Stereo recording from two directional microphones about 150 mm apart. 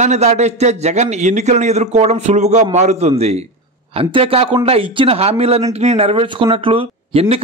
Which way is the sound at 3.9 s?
40° right (ahead or behind).